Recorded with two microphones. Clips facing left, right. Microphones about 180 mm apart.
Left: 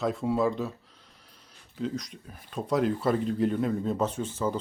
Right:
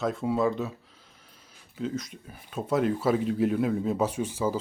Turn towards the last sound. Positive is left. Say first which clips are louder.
# right 2 dB
turn(degrees=-10)  # may be behind; listen again after turning